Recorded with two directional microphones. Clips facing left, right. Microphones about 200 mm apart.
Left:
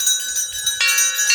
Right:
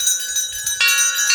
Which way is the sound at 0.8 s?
20° left (ahead or behind).